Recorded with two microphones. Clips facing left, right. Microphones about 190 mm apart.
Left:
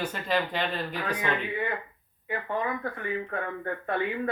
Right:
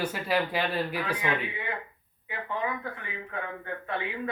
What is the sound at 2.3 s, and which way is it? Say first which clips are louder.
A man's voice: left 2 dB; 50° left (ahead or behind).